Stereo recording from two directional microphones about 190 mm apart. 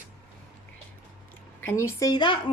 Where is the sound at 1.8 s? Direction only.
20° left (ahead or behind).